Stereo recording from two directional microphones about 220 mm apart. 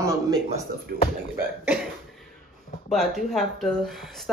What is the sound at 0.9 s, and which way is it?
Speech, 45° right (ahead or behind).